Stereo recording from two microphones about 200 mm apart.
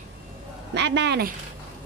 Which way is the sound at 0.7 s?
60° right (ahead or behind).